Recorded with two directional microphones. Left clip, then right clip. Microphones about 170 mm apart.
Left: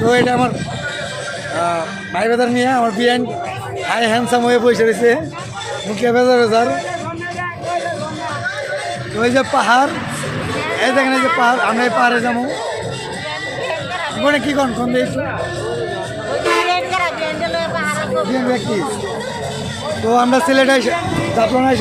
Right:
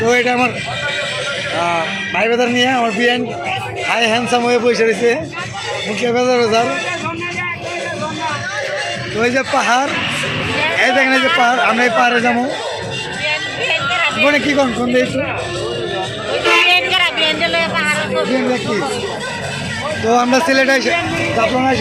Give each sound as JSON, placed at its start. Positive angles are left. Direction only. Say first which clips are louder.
{"t": 0.3, "sound": "a man's voice", "louder": "right 1 dB", "side_deg": 5}
{"t": 1.5, "sound": "a man's voice", "louder": "even", "side_deg": 5}
{"t": 9.1, "sound": "a man's voice", "louder": "left 1 dB", "side_deg": 5}
{"t": 14.2, "sound": "a man's voice", "louder": "left 1 dB", "side_deg": 0}
{"t": 16.6, "sound": "a sound", "louder": "right 4 dB", "side_deg": 5}
{"t": 20.1, "sound": "a man's voice", "louder": "even", "side_deg": 5}
{"t": 21.3, "sound": "speech", "louder": "left 1 dB", "side_deg": 20}